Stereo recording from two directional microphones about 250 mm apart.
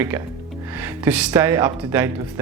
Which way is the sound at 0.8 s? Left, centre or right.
Centre.